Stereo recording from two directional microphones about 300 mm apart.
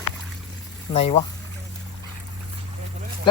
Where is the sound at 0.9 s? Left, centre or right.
Left.